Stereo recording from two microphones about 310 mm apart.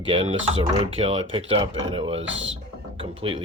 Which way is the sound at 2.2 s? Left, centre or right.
Right.